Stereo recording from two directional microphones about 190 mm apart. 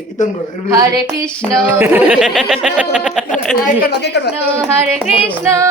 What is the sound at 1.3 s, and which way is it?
Speech, 5° left (ahead or behind).